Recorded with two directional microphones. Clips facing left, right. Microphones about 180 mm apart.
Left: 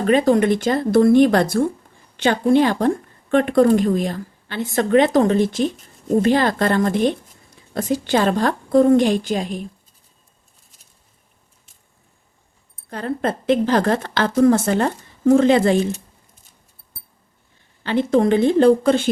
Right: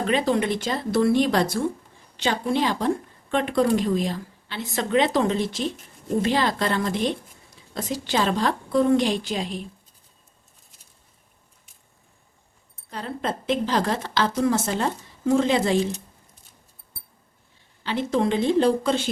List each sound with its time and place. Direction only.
0.1 s speech: 50° left (ahead or behind)
12.9 s a woman's voice: 55° left (ahead or behind)
17.8 s a woman's voice: 55° left (ahead or behind)